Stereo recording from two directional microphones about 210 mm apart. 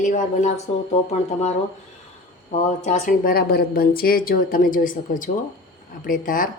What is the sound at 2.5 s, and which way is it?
A woman's voice, 35° left (ahead or behind).